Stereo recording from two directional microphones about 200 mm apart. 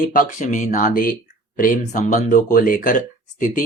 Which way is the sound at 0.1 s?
40° left (ahead or behind).